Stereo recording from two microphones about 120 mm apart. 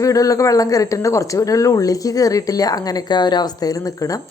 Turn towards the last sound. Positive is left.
turn(degrees=30)  # may be behind; listen again after turning